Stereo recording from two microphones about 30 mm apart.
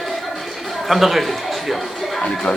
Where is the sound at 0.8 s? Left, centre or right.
Centre.